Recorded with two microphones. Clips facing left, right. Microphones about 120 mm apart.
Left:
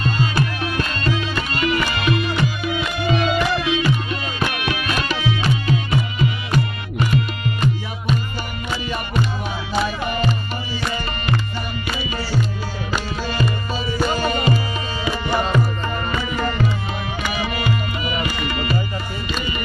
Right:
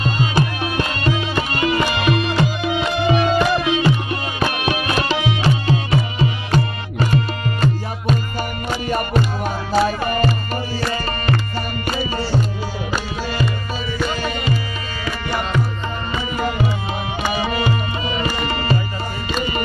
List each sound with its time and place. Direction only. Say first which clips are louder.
0.0 s music: right 1 dB; 25° right (ahead or behind)
8.6 s music: right 4 dB; 45° right (ahead or behind)
13.9 s music: left 3 dB; 35° left (ahead or behind)
15.0 s tabla: left 2 dB; 15° left (ahead or behind)
16.3 s music: right 2 dB; 10° right (ahead or behind)
17.2 s music: right 4 dB; 30° right (ahead or behind)